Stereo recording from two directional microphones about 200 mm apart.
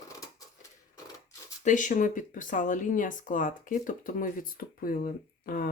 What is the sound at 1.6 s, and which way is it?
Speech, 40° left (ahead or behind).